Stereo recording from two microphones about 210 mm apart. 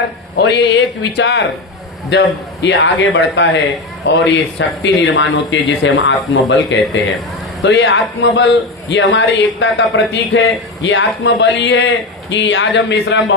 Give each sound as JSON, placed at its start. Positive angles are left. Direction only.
{"t": 0.3, "sound": "speech", "side_deg": 55}